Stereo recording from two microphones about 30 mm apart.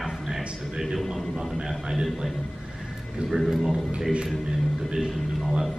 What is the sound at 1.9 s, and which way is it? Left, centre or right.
Speech, centre.